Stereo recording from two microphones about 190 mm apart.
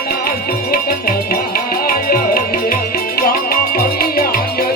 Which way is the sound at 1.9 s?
50° left (ahead or behind).